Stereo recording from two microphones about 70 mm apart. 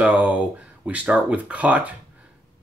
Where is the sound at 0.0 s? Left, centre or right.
Centre.